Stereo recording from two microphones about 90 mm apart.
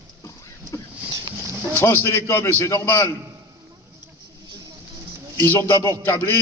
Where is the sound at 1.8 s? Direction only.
30° left (ahead or behind).